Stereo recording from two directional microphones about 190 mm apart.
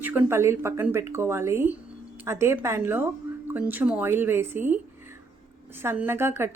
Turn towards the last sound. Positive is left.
turn(degrees=-15)  # may be behind; listen again after turning